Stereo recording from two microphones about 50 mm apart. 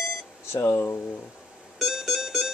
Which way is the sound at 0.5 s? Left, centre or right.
Left.